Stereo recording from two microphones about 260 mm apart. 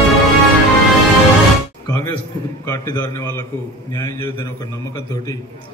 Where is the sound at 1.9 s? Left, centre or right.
Centre.